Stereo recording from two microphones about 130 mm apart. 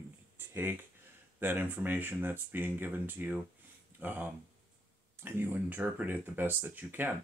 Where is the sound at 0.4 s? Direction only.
15° right (ahead or behind).